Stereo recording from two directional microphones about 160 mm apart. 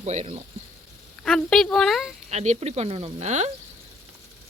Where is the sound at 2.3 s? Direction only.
45° right (ahead or behind).